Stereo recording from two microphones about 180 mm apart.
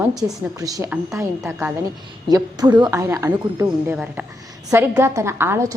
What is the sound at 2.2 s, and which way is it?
A woman's voice, 20° right (ahead or behind).